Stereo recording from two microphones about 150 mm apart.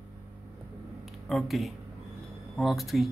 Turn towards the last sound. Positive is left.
turn(degrees=0)  # may be behind; listen again after turning